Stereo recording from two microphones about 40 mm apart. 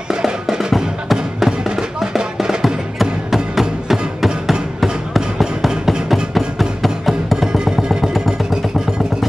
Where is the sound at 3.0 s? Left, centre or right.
Centre.